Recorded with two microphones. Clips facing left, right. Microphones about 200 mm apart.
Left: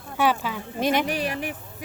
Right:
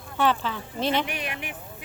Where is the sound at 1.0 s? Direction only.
35° left (ahead or behind).